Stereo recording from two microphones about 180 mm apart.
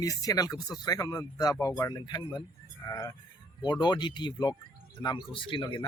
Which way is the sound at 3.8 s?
25° left (ahead or behind).